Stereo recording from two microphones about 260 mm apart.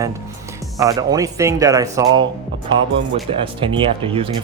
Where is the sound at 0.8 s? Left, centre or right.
Centre.